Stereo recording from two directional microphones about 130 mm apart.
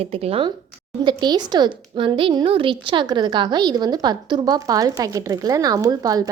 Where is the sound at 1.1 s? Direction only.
35° right (ahead or behind).